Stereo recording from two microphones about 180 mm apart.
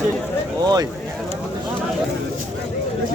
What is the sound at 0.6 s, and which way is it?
Speech, 20° right (ahead or behind).